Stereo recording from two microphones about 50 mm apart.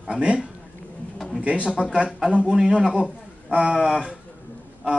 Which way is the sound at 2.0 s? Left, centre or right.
Centre.